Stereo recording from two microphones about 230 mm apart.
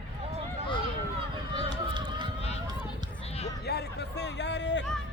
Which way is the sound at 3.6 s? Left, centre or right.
Left.